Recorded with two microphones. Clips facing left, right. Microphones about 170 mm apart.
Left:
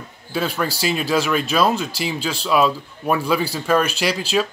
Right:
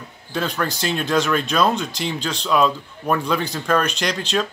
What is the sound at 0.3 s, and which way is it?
Speech, 5° left (ahead or behind).